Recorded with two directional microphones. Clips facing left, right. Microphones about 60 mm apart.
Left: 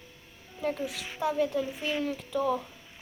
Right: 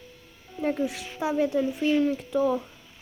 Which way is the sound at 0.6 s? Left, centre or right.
Centre.